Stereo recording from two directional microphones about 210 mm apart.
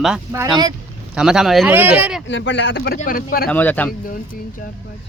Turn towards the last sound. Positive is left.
turn(degrees=10)  # may be behind; listen again after turning